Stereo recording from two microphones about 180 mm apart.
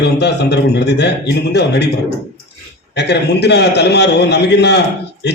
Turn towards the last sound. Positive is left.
turn(degrees=70)  # may be behind; listen again after turning